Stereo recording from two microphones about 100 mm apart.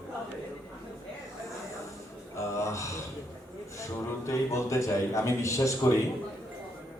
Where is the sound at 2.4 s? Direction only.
30° left (ahead or behind).